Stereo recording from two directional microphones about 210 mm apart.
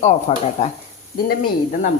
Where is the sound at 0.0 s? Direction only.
35° left (ahead or behind).